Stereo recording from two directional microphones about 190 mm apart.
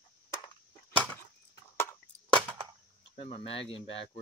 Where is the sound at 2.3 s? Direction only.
25° right (ahead or behind).